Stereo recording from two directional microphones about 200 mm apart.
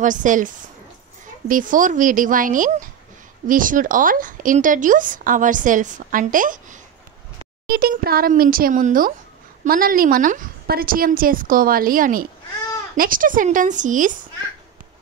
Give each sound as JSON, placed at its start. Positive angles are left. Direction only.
{"t": 0.0, "sound": "speech", "side_deg": -40}
{"t": 1.5, "sound": "a woman's voice", "side_deg": -40}